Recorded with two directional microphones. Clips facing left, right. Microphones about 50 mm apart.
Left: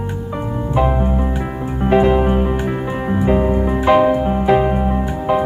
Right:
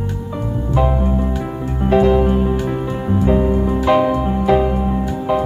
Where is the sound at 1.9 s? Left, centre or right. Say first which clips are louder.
Even; left.